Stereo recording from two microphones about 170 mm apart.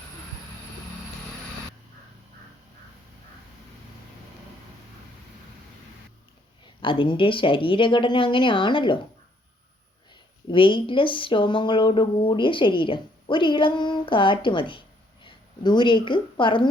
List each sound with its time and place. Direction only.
6.8 s a woman's voice: 30° left (ahead or behind)
10.5 s speech: 30° left (ahead or behind)